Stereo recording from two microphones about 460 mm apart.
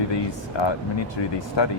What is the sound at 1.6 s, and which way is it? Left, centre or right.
Speech, left.